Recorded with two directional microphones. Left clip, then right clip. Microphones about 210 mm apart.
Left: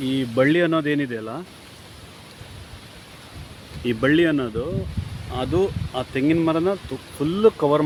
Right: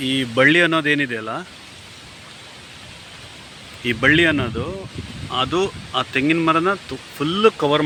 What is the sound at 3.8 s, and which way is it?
Speech, 10° left (ahead or behind).